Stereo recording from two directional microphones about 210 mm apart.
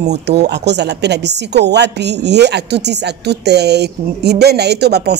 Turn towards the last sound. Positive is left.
turn(degrees=-50)  # may be behind; listen again after turning